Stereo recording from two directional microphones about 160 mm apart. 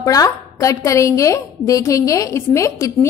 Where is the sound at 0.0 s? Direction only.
20° left (ahead or behind).